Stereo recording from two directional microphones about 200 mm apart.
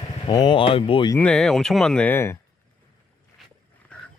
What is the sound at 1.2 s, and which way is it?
Speech, 5° left (ahead or behind).